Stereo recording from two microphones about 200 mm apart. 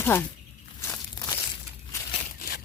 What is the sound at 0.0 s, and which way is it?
Speech, 10° left (ahead or behind).